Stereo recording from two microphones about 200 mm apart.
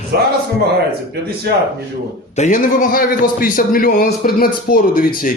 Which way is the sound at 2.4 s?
40° left (ahead or behind).